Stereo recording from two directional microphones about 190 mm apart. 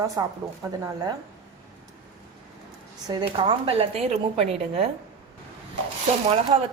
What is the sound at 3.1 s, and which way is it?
Speech, 25° right (ahead or behind).